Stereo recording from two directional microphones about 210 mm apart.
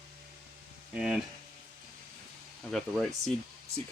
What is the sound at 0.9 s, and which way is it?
Speech, 5° right (ahead or behind).